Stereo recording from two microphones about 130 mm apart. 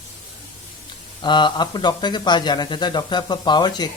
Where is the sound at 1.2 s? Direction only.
35° left (ahead or behind).